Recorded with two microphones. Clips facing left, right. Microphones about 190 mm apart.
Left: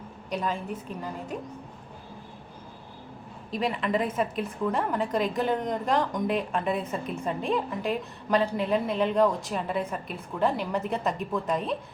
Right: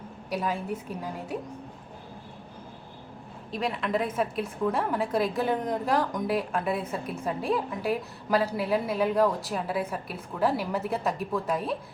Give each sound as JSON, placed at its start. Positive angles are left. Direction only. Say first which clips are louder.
{"t": 0.3, "sound": "a woman's voice", "louder": "right 1 dB", "side_deg": -10}
{"t": 3.5, "sound": "a woman's voice", "louder": "left 1 dB", "side_deg": 0}